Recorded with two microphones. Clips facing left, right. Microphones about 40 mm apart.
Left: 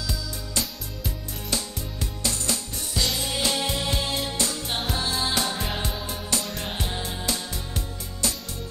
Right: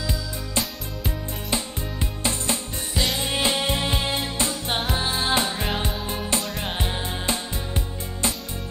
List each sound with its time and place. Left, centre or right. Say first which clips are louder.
0.6 s music: right 3 dB; right